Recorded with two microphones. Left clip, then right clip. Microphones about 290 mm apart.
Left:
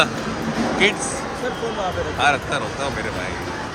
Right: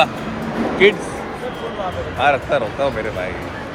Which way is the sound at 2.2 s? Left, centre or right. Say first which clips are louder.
Right 4 dB; centre.